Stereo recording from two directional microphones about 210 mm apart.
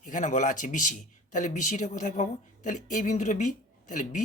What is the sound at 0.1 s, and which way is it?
A woman's voice, 35° left (ahead or behind).